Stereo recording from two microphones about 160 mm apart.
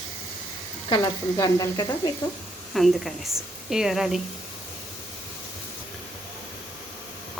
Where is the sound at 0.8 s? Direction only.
25° left (ahead or behind).